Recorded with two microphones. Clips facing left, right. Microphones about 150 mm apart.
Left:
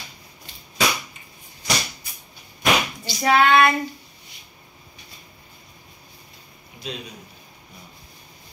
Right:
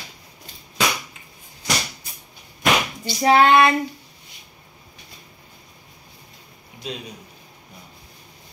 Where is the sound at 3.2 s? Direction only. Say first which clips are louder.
Right 2 dB; 30° right (ahead or behind).